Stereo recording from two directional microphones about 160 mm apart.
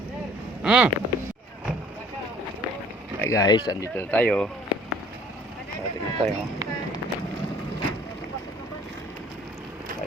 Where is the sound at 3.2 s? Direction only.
20° left (ahead or behind).